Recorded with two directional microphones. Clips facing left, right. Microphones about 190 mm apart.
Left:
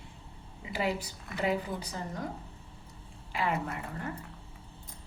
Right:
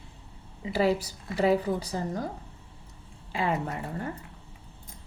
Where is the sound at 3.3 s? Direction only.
25° right (ahead or behind).